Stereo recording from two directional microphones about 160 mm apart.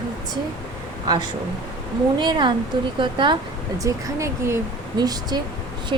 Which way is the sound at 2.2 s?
30° right (ahead or behind).